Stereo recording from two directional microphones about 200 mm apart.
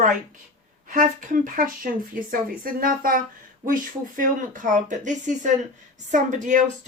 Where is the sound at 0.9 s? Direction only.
40° right (ahead or behind).